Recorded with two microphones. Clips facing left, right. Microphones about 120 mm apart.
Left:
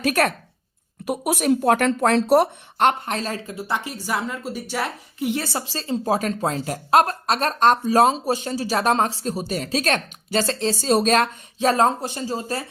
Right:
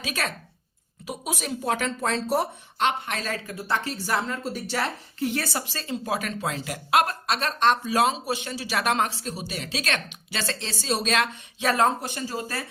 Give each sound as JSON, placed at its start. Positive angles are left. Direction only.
{"t": 0.0, "sound": "a woman's voice", "side_deg": 60}
{"t": 3.1, "sound": "speech", "side_deg": 30}
{"t": 3.8, "sound": "a woman's voice", "side_deg": 10}
{"t": 5.3, "sound": "a woman's voice", "side_deg": 25}